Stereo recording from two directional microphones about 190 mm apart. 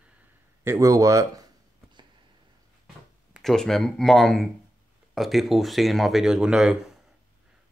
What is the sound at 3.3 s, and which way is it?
Speech, centre (ahead or behind).